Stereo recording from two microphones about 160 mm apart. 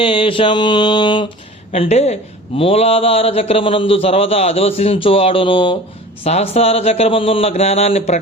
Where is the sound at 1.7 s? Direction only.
40° left (ahead or behind).